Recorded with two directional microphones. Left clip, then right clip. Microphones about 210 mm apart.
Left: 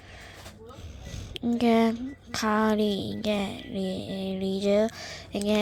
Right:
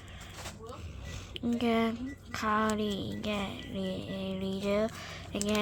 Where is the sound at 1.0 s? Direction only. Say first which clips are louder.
Left 3 dB; 15° left (ahead or behind).